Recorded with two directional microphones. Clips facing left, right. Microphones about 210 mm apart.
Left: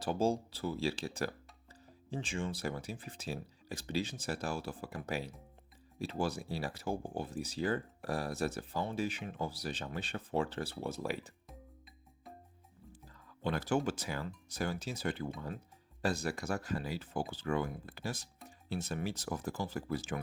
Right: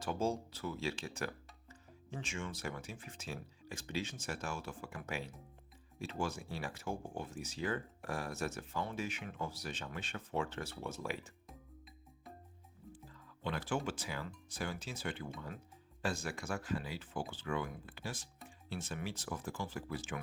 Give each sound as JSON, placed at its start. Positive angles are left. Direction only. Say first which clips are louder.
{"t": 0.0, "sound": "speech", "louder": "left 4 dB", "side_deg": 35}
{"t": 13.4, "sound": "speech", "louder": "left 5 dB", "side_deg": 40}